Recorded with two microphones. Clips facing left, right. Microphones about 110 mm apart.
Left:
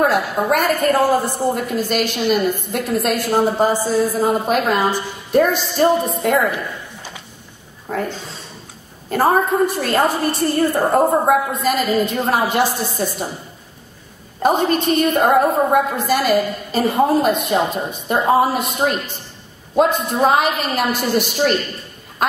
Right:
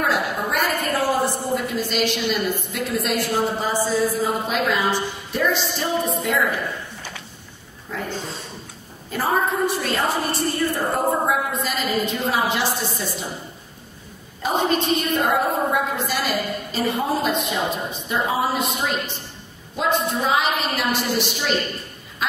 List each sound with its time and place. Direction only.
0.0 s a woman's voice: 45° left (ahead or behind)
7.0 s a sound: 15° left (ahead or behind)
7.9 s speech: 50° left (ahead or behind)
9.1 s a woman's voice: 50° left (ahead or behind)
14.4 s a woman's voice: 50° left (ahead or behind)